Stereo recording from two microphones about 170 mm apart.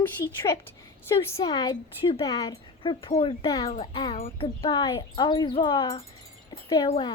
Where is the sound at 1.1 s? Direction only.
20° left (ahead or behind).